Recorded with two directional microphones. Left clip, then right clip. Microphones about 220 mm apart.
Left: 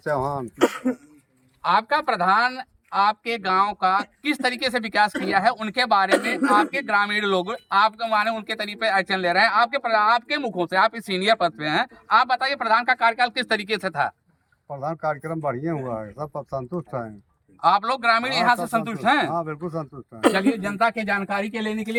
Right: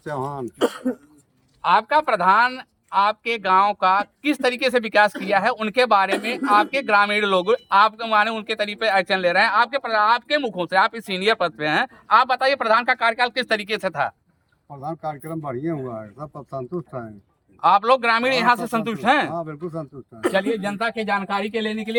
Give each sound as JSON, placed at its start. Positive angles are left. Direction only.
{"t": 0.0, "sound": "speech", "side_deg": 5}
{"t": 1.6, "sound": "speech", "side_deg": -15}
{"t": 14.8, "sound": "speech", "side_deg": 10}
{"t": 17.6, "sound": "speech", "side_deg": -15}
{"t": 19.3, "sound": "speech", "side_deg": 10}
{"t": 20.8, "sound": "speech", "side_deg": -10}